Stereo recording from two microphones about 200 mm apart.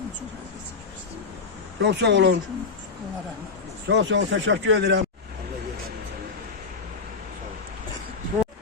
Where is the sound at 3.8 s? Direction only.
65° right (ahead or behind).